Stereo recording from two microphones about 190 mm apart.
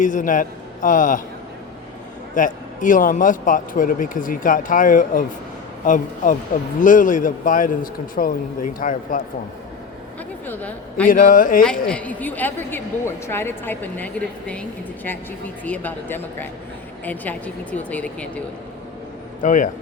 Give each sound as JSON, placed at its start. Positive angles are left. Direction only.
{"t": 0.0, "sound": "speech", "side_deg": 45}
{"t": 2.3, "sound": "speech", "side_deg": 45}
{"t": 10.4, "sound": "a woman's voice", "side_deg": 10}
{"t": 11.1, "sound": "speech", "side_deg": 45}
{"t": 11.9, "sound": "a woman's voice", "side_deg": 5}
{"t": 15.6, "sound": "a woman's voice", "side_deg": 10}
{"t": 19.4, "sound": "speech", "side_deg": 45}